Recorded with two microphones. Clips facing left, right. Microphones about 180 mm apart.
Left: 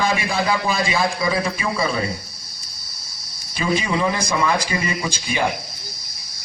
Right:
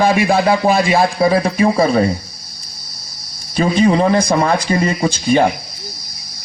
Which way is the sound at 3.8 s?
50° right (ahead or behind).